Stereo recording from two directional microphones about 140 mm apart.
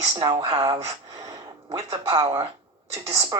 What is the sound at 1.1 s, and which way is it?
Gasp, 25° right (ahead or behind).